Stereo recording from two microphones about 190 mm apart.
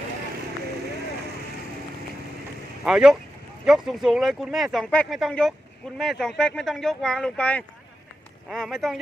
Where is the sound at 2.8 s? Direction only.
5° right (ahead or behind).